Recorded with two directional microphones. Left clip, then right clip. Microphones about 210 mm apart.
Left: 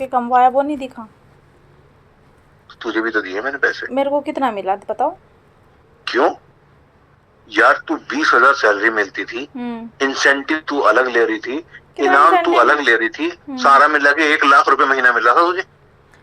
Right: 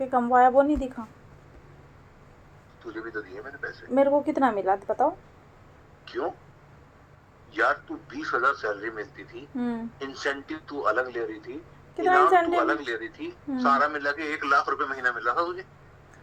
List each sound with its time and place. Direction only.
0.0 s a woman's voice: 15° left (ahead or behind)
2.7 s speech: 40° left (ahead or behind)
3.9 s a woman's voice: 15° left (ahead or behind)
6.1 s speech: 40° left (ahead or behind)
7.5 s speech: 40° left (ahead or behind)
9.6 s a woman's voice: 10° left (ahead or behind)
10.0 s speech: 35° left (ahead or behind)